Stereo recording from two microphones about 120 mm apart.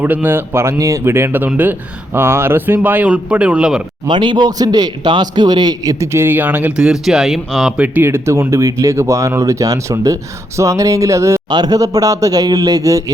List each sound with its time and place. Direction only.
0.0 s a man's voice: 15° right (ahead or behind)
4.0 s a man's voice: 40° right (ahead or behind); by 7.7 s centre (ahead or behind)
7.8 s a man's voice: 15° right (ahead or behind)
11.4 s a man's voice: 35° right (ahead or behind)